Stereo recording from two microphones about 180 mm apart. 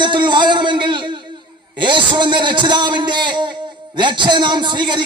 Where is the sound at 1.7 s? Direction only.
25° right (ahead or behind).